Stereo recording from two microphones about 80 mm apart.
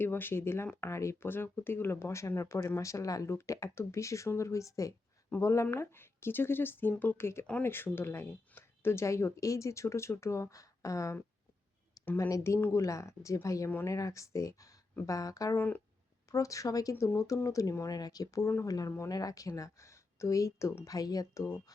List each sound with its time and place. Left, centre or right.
0.0 s speech: left